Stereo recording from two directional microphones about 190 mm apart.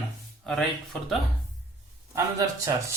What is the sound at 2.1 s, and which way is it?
Speech, 15° right (ahead or behind).